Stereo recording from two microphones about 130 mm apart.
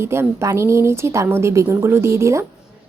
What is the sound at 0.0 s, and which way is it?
A woman's voice, 20° right (ahead or behind).